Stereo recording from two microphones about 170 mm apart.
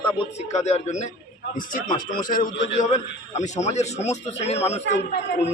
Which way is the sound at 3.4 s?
40° left (ahead or behind).